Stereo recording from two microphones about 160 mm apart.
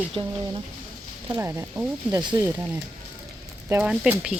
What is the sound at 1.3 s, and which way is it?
Speech, 20° right (ahead or behind).